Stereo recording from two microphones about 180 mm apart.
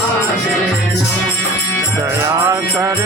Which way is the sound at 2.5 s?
15° right (ahead or behind).